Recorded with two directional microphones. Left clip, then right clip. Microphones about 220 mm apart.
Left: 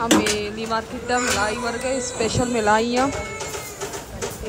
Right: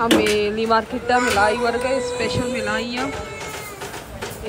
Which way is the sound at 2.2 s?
15° left (ahead or behind).